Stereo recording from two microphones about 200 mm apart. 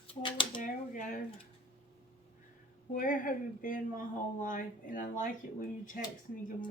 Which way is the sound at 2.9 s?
45° left (ahead or behind).